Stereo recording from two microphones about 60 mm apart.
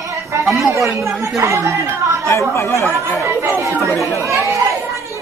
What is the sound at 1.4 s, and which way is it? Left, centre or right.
Speech, right.